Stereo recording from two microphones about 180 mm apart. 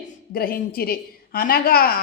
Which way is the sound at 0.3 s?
55° left (ahead or behind).